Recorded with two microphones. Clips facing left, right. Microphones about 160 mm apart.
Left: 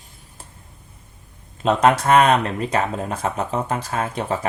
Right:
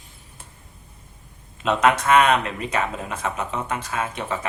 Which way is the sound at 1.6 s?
35° left (ahead or behind).